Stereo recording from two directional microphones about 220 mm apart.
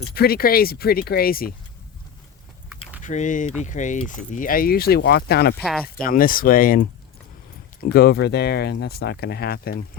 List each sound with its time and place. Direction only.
0.1 s speech: 45° left (ahead or behind)
3.0 s speech: 35° left (ahead or behind)
5.6 s speech: centre (ahead or behind)
6.0 s speech: 40° left (ahead or behind)